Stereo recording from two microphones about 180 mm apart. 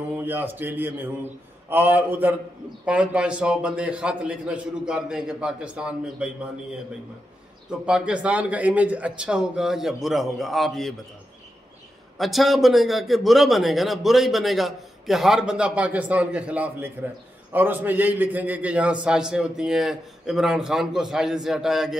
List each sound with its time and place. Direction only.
0.1 s a man's voice: 10° right (ahead or behind)
7.8 s a man's voice: 5° right (ahead or behind)
12.2 s a man's voice: centre (ahead or behind)